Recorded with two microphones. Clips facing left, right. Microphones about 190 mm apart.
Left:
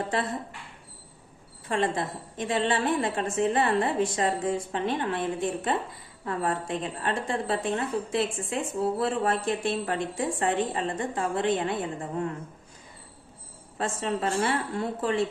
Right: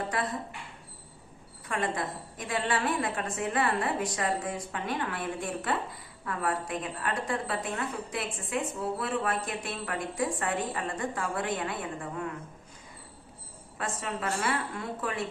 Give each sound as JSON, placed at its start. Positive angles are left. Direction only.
{"t": 1.6, "sound": "a woman's voice", "side_deg": 25}
{"t": 13.7, "sound": "a woman's voice", "side_deg": 30}